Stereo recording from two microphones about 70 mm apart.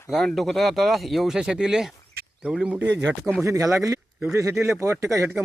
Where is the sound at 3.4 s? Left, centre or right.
Right.